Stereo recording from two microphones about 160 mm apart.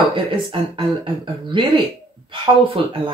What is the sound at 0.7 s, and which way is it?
Speech, 30° right (ahead or behind).